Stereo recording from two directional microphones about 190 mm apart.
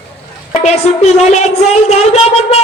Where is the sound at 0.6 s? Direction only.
35° left (ahead or behind).